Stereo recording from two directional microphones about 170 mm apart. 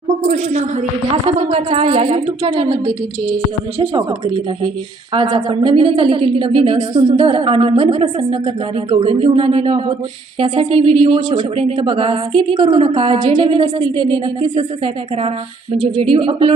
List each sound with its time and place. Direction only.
0.3 s speech: 50° right (ahead or behind)
1.1 s a woman's voice: 40° right (ahead or behind)
5.1 s a woman's voice: 30° right (ahead or behind)
16.0 s a woman's voice: 30° right (ahead or behind)